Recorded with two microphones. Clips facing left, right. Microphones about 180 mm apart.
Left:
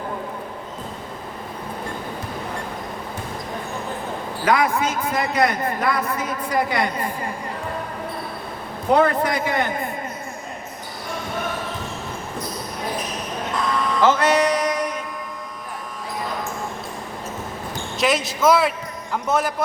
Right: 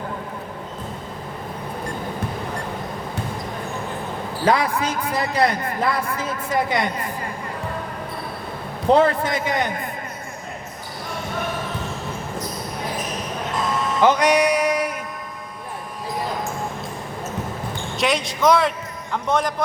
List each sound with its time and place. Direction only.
4.4 s a man's voice: 30° right (ahead or behind)
8.9 s a man's voice: 30° right (ahead or behind)
13.7 s a sound: 25° right (ahead or behind)
17.9 s speech: centre (ahead or behind)